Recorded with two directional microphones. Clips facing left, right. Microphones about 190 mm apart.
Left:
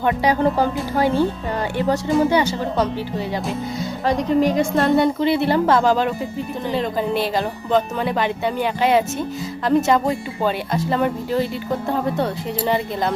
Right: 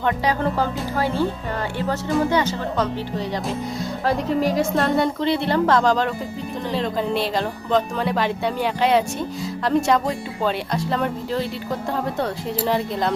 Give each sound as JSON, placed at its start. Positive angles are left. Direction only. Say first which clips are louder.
{"t": 0.0, "sound": "speech", "louder": "left 4 dB", "side_deg": 10}
{"t": 4.0, "sound": "speech", "louder": "left 3 dB", "side_deg": -5}